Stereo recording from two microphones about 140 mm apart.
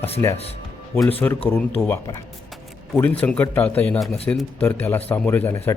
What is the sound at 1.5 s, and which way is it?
Speech, 15° left (ahead or behind).